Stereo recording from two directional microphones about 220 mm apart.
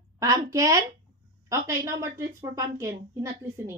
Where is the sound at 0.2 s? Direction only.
15° right (ahead or behind).